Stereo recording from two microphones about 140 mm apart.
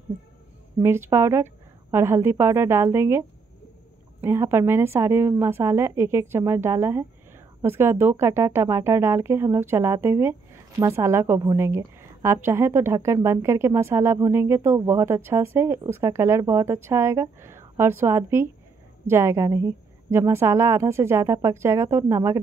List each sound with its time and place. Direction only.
0.7 s a woman's voice: 20° right (ahead or behind)